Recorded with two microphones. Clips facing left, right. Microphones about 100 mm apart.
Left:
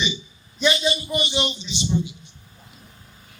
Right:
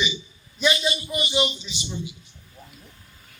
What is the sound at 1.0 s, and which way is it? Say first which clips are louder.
Speech: even; 25° left (ahead or behind).